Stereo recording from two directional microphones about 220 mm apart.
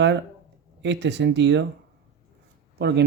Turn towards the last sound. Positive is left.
turn(degrees=-50)  # may be behind; listen again after turning